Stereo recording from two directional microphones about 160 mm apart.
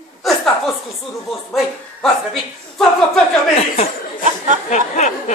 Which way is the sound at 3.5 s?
40° left (ahead or behind).